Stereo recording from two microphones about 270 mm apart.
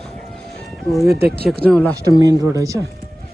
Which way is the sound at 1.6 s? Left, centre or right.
Centre.